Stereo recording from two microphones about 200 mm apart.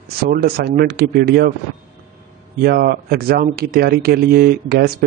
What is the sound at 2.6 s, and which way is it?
Speech, 50° right (ahead or behind).